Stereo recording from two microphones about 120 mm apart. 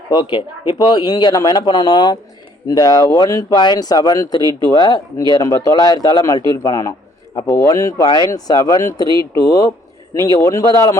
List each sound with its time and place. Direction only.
0.1 s a man's voice: 40° left (ahead or behind)